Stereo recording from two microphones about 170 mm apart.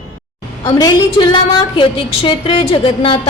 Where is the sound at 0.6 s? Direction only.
20° left (ahead or behind).